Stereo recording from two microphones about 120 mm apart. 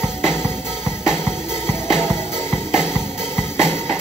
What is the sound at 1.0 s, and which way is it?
Music, 20° left (ahead or behind).